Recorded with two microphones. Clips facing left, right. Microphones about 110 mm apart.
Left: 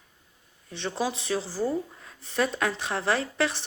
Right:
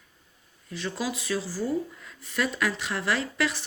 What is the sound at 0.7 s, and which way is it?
Speech, 30° left (ahead or behind).